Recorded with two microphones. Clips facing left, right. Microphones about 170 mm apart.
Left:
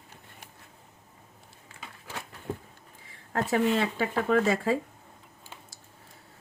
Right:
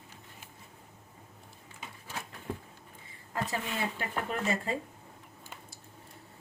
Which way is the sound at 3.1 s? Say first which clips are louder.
Left 6 dB; 85° left.